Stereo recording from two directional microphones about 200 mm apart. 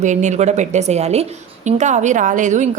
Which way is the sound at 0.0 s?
35° right (ahead or behind).